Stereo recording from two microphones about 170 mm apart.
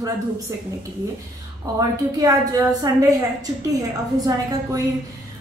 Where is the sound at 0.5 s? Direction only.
20° right (ahead or behind).